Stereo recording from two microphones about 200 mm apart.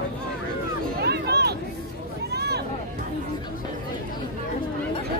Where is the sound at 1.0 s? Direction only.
55° right (ahead or behind).